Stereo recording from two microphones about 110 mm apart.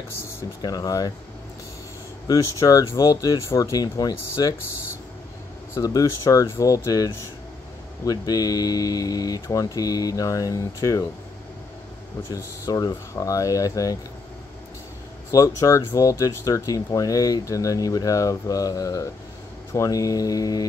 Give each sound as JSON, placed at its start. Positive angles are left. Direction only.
{"t": 0.6, "sound": "speech", "side_deg": 35}
{"t": 2.2, "sound": "speech", "side_deg": 30}
{"t": 5.8, "sound": "speech", "side_deg": 30}
{"t": 12.3, "sound": "speech", "side_deg": 35}
{"t": 15.3, "sound": "speech", "side_deg": 30}